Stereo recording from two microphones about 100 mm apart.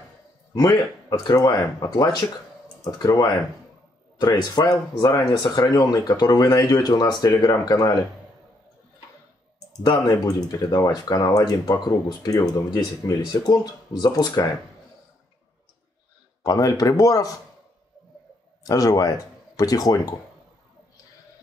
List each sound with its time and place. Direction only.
1.3 s speech: 40° left (ahead or behind)
10.1 s speech: 40° left (ahead or behind)
16.4 s speech: 35° left (ahead or behind)
18.6 s speech: 35° left (ahead or behind)